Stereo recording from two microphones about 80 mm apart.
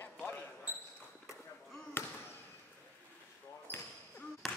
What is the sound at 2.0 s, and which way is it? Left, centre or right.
Basketball bounce, left.